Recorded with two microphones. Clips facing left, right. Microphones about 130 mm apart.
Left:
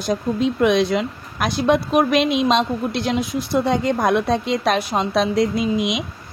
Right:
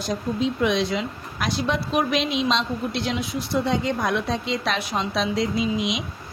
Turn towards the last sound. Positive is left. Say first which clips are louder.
# left 4 dB
turn(degrees=55)  # may be behind; listen again after turning